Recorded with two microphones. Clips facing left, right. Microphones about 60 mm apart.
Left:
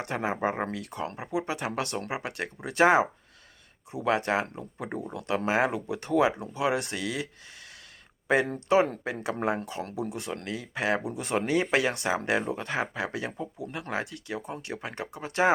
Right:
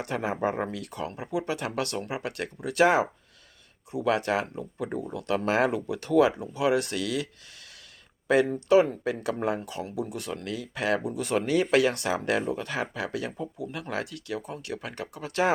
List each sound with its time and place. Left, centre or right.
0.0 s speech: left